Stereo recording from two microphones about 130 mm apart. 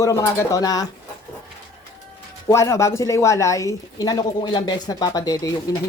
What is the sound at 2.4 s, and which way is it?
Speech, 20° left (ahead or behind).